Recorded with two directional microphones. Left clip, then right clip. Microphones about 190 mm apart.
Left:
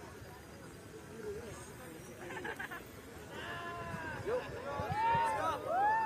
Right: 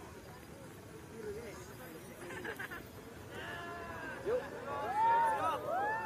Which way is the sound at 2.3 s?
70° right (ahead or behind).